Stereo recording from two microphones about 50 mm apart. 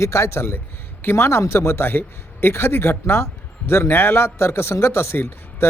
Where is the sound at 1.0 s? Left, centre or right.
Left.